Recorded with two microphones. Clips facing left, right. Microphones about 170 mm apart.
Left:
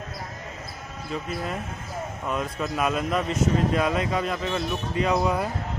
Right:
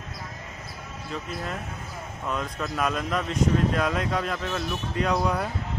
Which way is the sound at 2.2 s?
5° left (ahead or behind).